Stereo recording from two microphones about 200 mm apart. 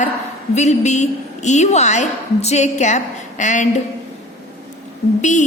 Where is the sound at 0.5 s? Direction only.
35° left (ahead or behind).